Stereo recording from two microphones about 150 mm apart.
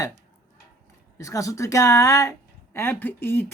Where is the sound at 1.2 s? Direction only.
20° left (ahead or behind).